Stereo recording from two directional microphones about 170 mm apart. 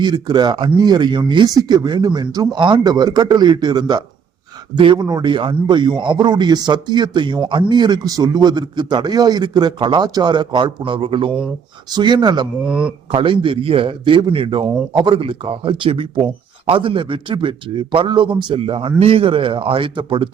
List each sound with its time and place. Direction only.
0.0 s a man's voice: 25° right (ahead or behind)
12.6 s speech: 5° right (ahead or behind)
13.1 s speech: 30° right (ahead or behind)